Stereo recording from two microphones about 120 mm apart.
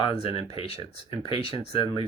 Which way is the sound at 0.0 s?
50° left (ahead or behind).